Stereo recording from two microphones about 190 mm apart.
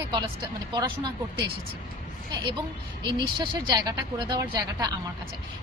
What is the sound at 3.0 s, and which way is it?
Speech, 25° right (ahead or behind).